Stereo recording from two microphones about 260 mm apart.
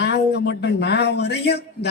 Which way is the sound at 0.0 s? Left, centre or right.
Left.